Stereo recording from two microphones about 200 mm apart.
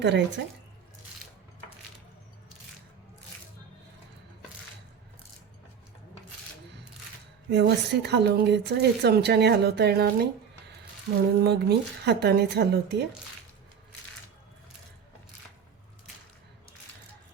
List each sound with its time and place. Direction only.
0.0 s a woman's voice: 65° right (ahead or behind)
7.5 s a woman's voice: 55° right (ahead or behind)
11.4 s a woman's voice: 55° right (ahead or behind)